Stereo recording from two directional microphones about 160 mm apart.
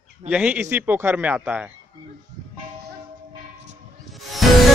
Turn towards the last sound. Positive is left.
turn(degrees=0)  # may be behind; listen again after turning